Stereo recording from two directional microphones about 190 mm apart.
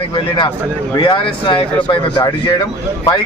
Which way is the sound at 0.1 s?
25° left (ahead or behind).